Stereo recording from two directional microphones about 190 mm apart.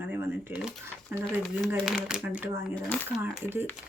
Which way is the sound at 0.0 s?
10° right (ahead or behind).